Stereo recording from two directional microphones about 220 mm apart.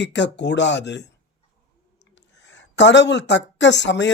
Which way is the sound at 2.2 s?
55° left (ahead or behind).